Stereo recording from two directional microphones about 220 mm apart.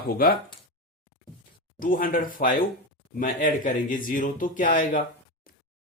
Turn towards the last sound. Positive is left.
turn(degrees=40)  # may be behind; listen again after turning